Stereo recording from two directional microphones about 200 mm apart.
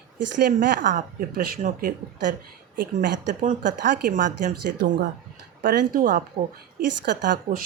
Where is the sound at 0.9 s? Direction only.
45° right (ahead or behind).